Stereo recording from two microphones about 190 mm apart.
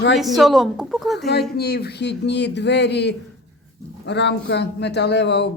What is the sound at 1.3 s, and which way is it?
A man's voice, 60° left (ahead or behind).